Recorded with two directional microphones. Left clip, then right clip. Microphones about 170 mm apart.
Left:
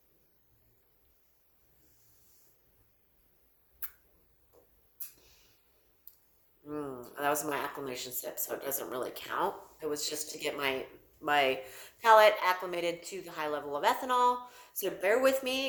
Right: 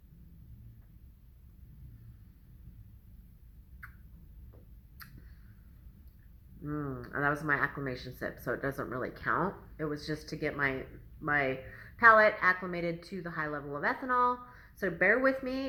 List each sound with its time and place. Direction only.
6.7 s a woman's voice: 25° left (ahead or behind)